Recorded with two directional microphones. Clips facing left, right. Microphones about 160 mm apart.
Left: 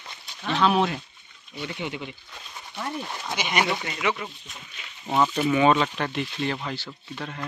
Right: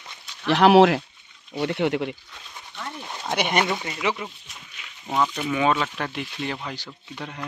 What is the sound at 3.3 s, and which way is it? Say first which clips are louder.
Speech: right 6 dB; 55° right (ahead or behind).